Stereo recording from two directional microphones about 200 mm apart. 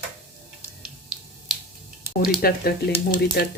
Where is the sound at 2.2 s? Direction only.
50° left (ahead or behind).